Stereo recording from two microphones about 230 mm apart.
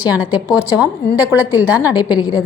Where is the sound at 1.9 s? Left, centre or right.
Centre.